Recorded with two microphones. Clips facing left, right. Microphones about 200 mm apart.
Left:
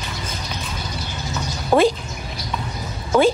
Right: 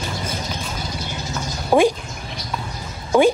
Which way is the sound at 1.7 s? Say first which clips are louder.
Even; 15° right (ahead or behind).